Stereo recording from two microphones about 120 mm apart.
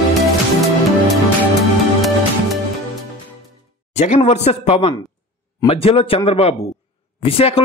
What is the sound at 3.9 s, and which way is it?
Speech, 65° left (ahead or behind).